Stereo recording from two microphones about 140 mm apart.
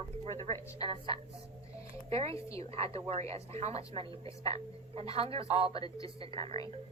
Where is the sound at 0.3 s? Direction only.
50° right (ahead or behind).